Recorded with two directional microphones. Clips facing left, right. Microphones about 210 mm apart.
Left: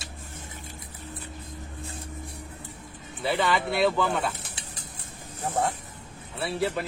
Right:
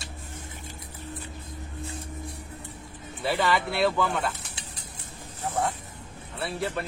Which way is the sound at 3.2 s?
Centre (ahead or behind).